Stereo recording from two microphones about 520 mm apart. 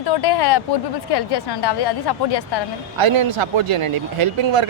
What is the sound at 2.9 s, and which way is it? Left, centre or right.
Speech, right.